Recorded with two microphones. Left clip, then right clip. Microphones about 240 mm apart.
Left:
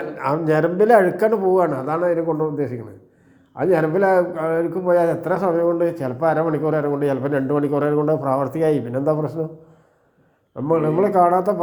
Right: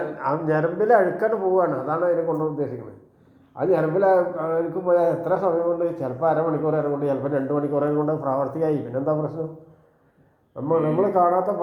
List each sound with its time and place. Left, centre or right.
0.5 s a man's voice: left
10.7 s a man's voice: left